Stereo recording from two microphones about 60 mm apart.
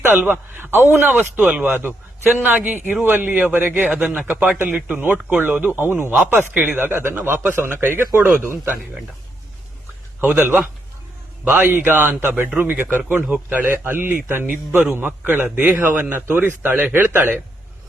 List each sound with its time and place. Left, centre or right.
0.0 s a man's voice: right
1.5 s speech: centre
1.7 s a man's voice: right
3.9 s a man's voice: centre; by 8.3 s right
10.3 s a man's voice: right
11.7 s a man's voice: right
13.7 s a man's voice: right